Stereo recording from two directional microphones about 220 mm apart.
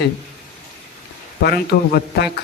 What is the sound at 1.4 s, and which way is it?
Speech, 45° left (ahead or behind).